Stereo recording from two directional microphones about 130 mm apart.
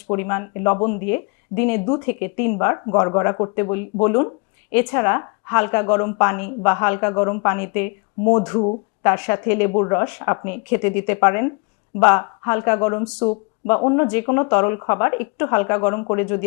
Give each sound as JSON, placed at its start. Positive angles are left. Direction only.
{"t": 0.1, "sound": "a woman's voice", "side_deg": 20}